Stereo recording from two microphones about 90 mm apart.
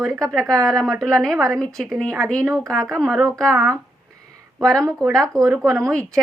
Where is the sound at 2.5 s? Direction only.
35° right (ahead or behind).